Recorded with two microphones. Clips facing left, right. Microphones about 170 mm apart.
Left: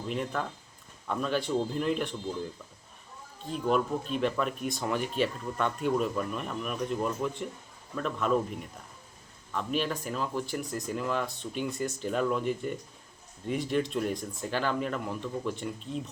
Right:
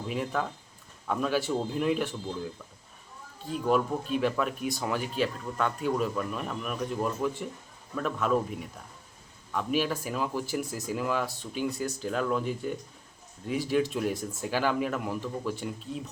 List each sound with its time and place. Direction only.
0.1 s speech: 5° right (ahead or behind)
3.5 s speech: 5° right (ahead or behind)
9.6 s speech: 5° right (ahead or behind)